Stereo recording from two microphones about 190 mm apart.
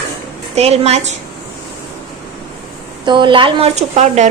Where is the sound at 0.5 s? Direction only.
35° right (ahead or behind).